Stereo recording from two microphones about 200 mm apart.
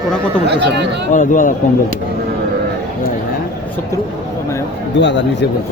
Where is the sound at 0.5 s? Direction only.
60° right (ahead or behind).